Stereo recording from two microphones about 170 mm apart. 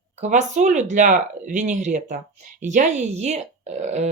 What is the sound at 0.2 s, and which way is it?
Speech, 45° right (ahead or behind).